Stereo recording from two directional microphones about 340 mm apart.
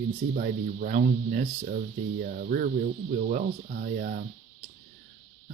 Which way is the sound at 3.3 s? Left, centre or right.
Right.